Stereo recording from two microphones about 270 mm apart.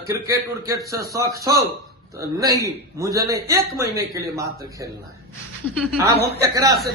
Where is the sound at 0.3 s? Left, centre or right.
Centre.